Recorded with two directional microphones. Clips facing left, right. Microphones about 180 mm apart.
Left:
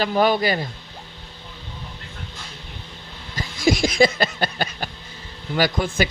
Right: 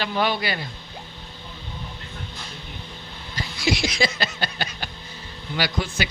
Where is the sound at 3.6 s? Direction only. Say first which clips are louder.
Left 6 dB; 50° left (ahead or behind).